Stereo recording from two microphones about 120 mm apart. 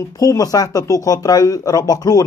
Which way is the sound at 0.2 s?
30° left (ahead or behind).